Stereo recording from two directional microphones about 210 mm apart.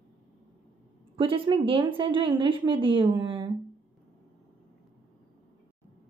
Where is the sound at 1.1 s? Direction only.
25° right (ahead or behind).